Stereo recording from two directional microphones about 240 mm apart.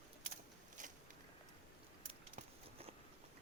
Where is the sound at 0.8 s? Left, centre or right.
Right.